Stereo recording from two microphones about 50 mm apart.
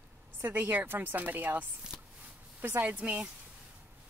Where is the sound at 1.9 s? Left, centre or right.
Centre.